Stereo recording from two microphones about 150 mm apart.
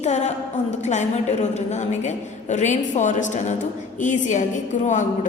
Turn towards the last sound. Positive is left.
turn(degrees=55)  # may be behind; listen again after turning